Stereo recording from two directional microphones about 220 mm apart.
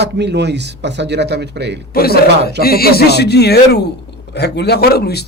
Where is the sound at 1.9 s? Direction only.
45° left (ahead or behind).